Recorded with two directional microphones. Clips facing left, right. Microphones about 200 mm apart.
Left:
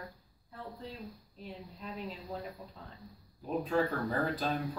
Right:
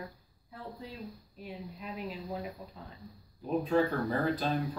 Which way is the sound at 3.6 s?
Centre (ahead or behind).